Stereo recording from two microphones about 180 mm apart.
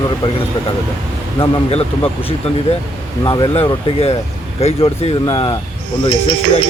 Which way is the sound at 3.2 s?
25° left (ahead or behind).